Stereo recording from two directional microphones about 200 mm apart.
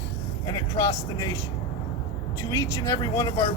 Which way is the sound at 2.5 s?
15° left (ahead or behind).